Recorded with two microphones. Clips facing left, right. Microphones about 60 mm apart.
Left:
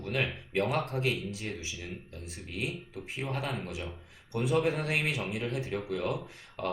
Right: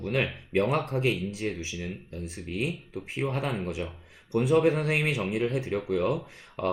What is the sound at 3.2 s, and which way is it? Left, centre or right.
Speech, right.